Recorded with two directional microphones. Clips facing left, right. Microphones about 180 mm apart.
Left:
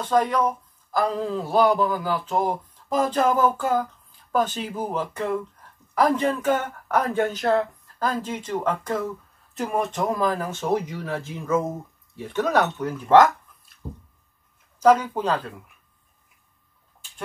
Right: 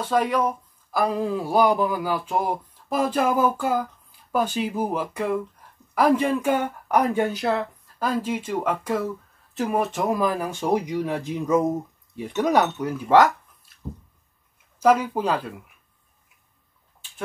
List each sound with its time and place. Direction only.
0.0 s speech: 10° right (ahead or behind)
13.8 s squish: 10° left (ahead or behind)
14.8 s speech: 10° right (ahead or behind)